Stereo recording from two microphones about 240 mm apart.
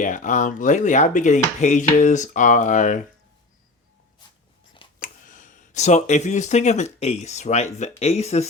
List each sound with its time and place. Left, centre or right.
0.0 s speech: left
4.9 s speech: left